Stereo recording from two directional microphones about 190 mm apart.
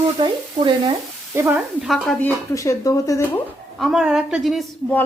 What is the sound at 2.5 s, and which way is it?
Speech, 15° left (ahead or behind).